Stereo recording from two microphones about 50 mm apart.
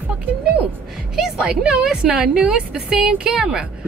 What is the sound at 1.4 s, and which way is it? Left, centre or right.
A woman's voice, centre.